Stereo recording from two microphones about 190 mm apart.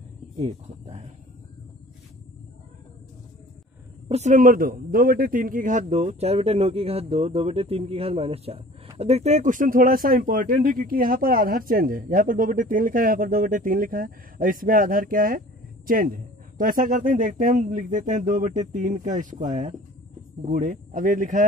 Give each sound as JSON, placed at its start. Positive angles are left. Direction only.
{"t": 0.4, "sound": "speech", "side_deg": -35}
{"t": 4.1, "sound": "a man's voice", "side_deg": -40}